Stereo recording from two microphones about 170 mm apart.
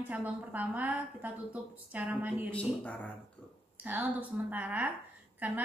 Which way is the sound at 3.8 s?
10° right (ahead or behind).